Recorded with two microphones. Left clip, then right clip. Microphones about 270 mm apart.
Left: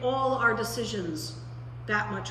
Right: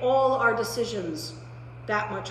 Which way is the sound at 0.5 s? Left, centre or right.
Right.